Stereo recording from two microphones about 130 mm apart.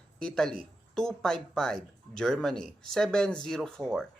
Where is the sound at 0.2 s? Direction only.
5° left (ahead or behind).